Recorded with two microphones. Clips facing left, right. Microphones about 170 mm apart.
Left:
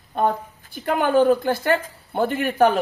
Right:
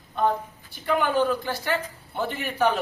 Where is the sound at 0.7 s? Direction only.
50° left (ahead or behind).